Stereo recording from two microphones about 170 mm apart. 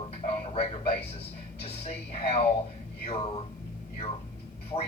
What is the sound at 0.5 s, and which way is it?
A man's voice, 35° left (ahead or behind).